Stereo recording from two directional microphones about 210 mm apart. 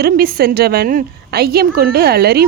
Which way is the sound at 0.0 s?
45° right (ahead or behind).